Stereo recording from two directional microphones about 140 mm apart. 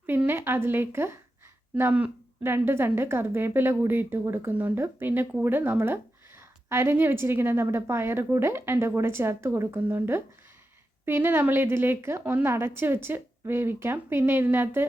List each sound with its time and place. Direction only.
0.0 s a woman's voice: 15° right (ahead or behind)